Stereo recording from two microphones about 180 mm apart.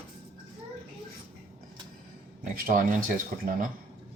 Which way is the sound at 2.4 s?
45° right (ahead or behind).